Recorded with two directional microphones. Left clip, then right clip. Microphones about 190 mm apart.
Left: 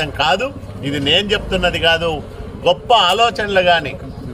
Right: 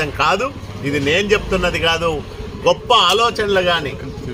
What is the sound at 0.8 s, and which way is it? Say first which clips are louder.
Speech: left 1 dB; 25° left (ahead or behind).